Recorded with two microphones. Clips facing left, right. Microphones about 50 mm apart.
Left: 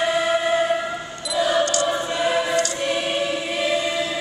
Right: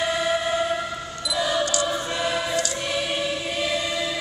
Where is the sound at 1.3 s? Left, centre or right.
Centre.